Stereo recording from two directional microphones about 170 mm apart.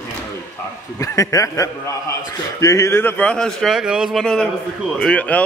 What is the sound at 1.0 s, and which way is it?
A man's voice, 20° left (ahead or behind).